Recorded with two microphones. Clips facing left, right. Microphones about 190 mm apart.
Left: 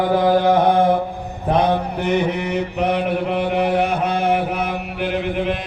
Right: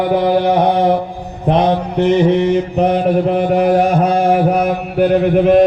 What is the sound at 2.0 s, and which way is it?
Mantra, 30° right (ahead or behind).